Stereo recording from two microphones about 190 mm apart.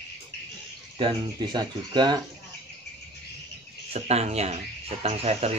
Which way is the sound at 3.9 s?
35° right (ahead or behind).